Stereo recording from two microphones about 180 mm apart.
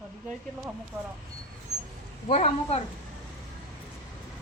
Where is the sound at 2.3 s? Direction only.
35° left (ahead or behind).